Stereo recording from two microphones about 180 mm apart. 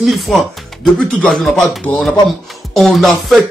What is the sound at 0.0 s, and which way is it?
Speech, centre (ahead or behind).